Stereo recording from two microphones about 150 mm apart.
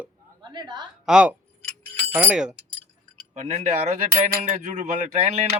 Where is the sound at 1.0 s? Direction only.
5° right (ahead or behind).